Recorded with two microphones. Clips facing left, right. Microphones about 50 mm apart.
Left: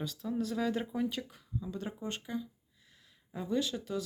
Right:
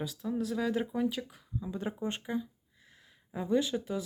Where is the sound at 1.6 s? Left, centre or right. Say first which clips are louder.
Right 5 dB; centre.